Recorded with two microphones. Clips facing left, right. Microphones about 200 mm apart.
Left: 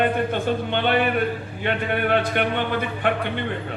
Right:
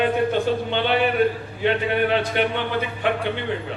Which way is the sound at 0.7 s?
55° left (ahead or behind).